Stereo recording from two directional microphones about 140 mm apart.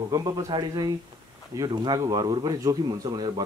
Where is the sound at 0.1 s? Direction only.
25° right (ahead or behind).